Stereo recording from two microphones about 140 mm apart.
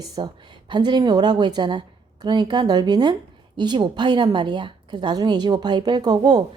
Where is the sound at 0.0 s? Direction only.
30° right (ahead or behind).